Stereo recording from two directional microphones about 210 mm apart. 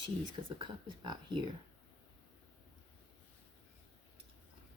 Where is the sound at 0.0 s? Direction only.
25° right (ahead or behind).